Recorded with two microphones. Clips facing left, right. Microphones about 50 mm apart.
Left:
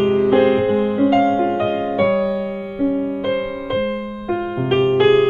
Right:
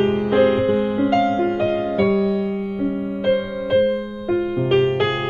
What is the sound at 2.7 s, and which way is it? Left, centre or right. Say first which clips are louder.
Music: left 4 dB; centre.